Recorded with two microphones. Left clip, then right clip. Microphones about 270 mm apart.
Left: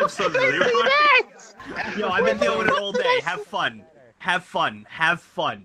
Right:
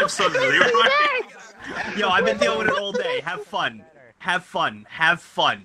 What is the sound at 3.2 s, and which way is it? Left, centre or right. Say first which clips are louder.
Speech: left 2 dB; centre.